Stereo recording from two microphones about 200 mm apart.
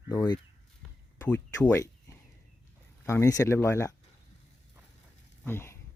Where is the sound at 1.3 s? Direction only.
10° left (ahead or behind).